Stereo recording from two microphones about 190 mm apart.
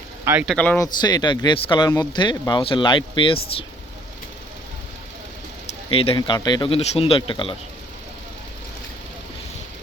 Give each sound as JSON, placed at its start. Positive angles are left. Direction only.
{"t": 0.4, "sound": "speech", "side_deg": 5}
{"t": 0.8, "sound": "speech", "side_deg": 20}
{"t": 5.9, "sound": "speech", "side_deg": 30}